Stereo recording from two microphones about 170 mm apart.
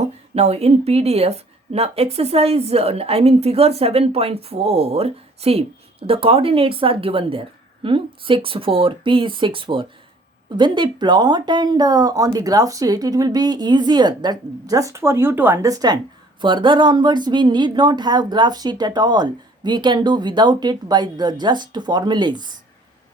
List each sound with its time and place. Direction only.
0.0 s a woman's voice: 40° right (ahead or behind)